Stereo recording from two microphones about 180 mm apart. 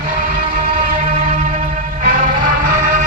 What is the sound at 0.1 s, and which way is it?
Vehicle, 50° right (ahead or behind).